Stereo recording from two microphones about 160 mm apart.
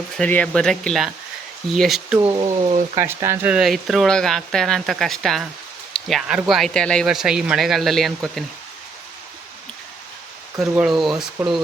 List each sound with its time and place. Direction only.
0.2 s speech: 10° left (ahead or behind)
2.3 s speech: 30° right (ahead or behind)
3.0 s speech: 15° right (ahead or behind); by 8.4 s centre (ahead or behind)
10.6 s speech: centre (ahead or behind)